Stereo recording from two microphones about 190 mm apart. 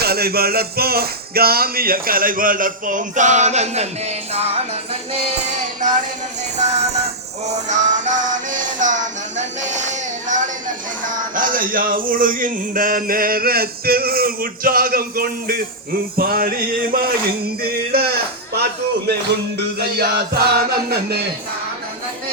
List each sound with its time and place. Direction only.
0.0 s speech: 55° right (ahead or behind); by 5.9 s 40° right (ahead or behind)
6.6 s music: 35° right (ahead or behind)
9.4 s a sound: 40° right (ahead or behind)
11.0 s a man's voice: 45° right (ahead or behind)